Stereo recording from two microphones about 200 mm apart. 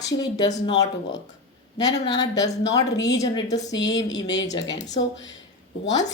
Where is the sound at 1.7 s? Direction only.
20° left (ahead or behind).